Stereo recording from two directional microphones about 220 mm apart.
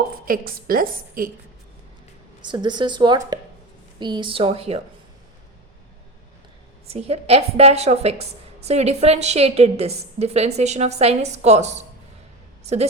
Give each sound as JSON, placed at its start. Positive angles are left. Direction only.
{"t": 0.3, "sound": "a woman's voice", "side_deg": -40}
{"t": 2.4, "sound": "a woman's voice", "side_deg": -20}
{"t": 6.8, "sound": "a woman's voice", "side_deg": -25}